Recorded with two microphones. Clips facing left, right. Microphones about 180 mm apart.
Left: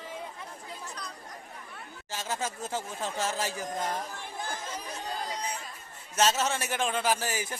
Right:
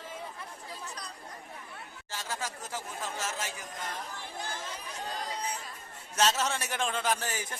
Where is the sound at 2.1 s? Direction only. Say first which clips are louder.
Left 4 dB; 20° left (ahead or behind); by 4.0 s 35° left (ahead or behind).